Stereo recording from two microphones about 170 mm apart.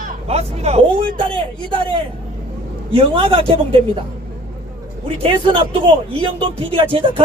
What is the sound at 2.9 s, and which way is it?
Speech, 30° right (ahead or behind).